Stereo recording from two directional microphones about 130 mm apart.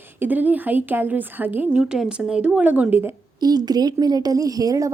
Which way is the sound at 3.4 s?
30° right (ahead or behind).